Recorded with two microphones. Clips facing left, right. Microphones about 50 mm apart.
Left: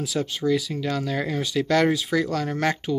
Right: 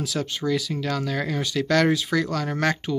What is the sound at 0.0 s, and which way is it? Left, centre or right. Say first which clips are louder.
Speech: left 2 dB; centre.